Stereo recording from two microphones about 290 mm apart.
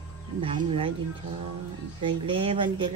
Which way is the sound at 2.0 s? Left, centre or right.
Centre.